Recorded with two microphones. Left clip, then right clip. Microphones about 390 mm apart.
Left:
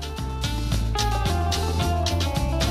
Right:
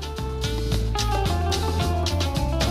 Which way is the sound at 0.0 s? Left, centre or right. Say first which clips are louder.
Right 1 dB; centre.